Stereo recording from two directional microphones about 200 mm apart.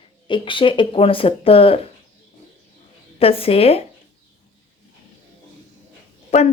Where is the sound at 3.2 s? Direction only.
30° left (ahead or behind).